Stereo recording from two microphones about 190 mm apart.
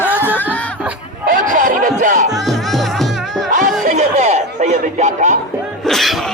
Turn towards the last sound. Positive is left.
turn(degrees=0)  # may be behind; listen again after turning